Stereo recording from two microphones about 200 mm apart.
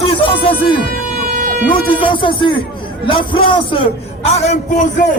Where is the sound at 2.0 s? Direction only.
25° left (ahead or behind).